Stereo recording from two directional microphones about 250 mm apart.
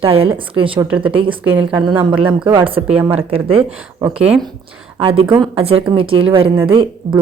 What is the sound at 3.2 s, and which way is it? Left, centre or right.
Speech, right.